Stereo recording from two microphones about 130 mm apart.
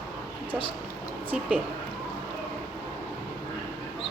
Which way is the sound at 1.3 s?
10° right (ahead or behind).